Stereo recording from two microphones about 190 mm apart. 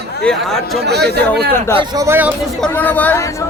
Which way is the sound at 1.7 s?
15° right (ahead or behind).